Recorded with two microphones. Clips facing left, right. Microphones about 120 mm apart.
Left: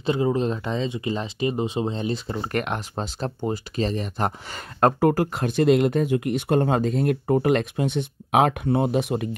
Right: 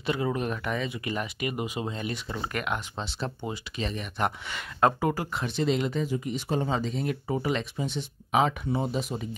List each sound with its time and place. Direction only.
0.0 s speech: 25° left (ahead or behind)
2.4 s speech: 40° left (ahead or behind); by 9.3 s 70° left (ahead or behind)